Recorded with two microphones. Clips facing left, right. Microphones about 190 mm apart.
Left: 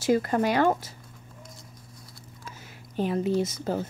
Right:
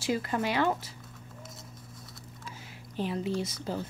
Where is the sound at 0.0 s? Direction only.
45° left (ahead or behind).